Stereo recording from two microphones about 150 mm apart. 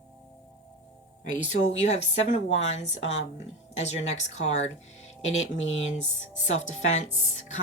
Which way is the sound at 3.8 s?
50° left (ahead or behind).